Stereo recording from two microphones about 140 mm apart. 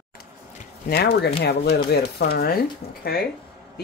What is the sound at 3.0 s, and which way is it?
Speech, 90° left.